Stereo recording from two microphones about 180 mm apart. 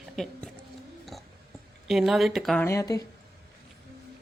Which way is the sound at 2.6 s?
15° left (ahead or behind).